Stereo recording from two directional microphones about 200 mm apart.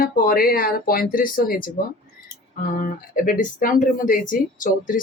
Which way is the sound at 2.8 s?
45° left (ahead or behind).